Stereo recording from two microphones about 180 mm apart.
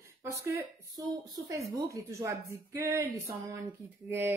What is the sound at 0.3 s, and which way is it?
A woman's voice, 15° right (ahead or behind).